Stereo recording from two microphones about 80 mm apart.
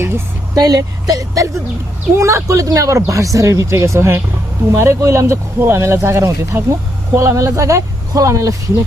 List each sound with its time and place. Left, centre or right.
0.5 s speech: right
5.5 s speech: right